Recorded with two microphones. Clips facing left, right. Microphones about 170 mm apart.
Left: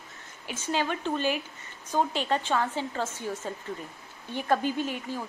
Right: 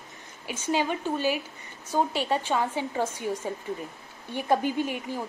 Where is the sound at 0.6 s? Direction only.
10° right (ahead or behind).